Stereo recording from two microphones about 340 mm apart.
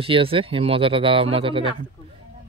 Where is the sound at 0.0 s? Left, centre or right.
Centre.